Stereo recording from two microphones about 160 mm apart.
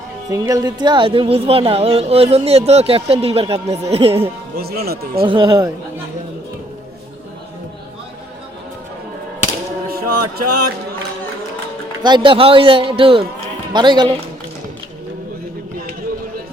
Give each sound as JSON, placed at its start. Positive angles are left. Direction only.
{"t": 0.3, "sound": "speech", "side_deg": -20}
{"t": 4.5, "sound": "speech", "side_deg": -75}
{"t": 5.2, "sound": "speech", "side_deg": -30}
{"t": 9.9, "sound": "a sound", "side_deg": -70}
{"t": 12.0, "sound": "speech", "side_deg": -30}